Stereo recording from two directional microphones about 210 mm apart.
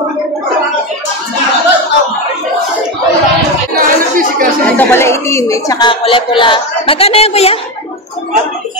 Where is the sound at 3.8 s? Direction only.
40° right (ahead or behind).